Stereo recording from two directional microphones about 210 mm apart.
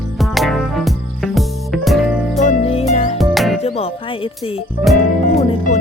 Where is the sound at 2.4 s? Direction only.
30° left (ahead or behind).